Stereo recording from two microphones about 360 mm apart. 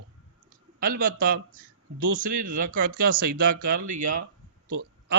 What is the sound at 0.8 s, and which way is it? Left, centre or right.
Speech, right.